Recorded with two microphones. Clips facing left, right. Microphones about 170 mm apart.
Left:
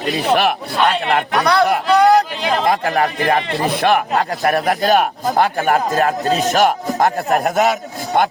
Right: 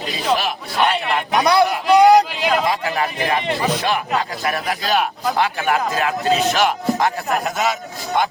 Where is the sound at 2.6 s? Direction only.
50° left (ahead or behind).